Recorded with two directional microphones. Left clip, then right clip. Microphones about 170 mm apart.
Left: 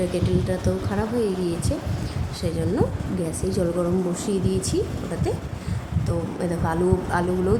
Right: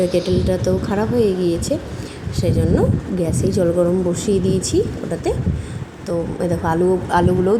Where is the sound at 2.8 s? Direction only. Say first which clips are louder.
Right 6 dB; 20° right (ahead or behind).